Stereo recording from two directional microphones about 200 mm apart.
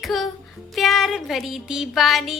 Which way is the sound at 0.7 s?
Centre (ahead or behind).